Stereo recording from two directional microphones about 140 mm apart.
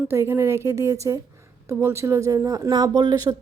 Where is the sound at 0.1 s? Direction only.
20° right (ahead or behind).